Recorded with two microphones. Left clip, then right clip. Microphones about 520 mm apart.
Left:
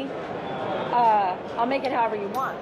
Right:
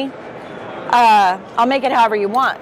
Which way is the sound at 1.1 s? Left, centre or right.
Right.